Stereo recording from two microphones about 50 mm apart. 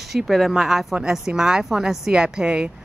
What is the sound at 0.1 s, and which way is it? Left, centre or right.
Speech, centre.